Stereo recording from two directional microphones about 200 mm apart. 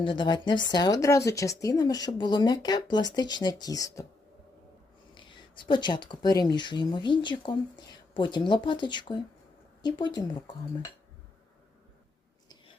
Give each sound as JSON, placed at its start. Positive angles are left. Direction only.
{"t": 0.0, "sound": "speech", "side_deg": 25}
{"t": 5.1, "sound": "speech", "side_deg": 25}